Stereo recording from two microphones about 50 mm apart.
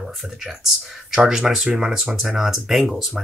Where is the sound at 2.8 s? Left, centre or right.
Centre.